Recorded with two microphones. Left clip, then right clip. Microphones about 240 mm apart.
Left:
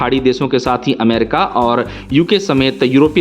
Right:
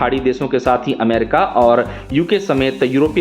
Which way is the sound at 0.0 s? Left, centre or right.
Left.